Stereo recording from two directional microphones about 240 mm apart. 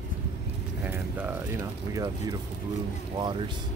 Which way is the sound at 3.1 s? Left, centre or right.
Centre.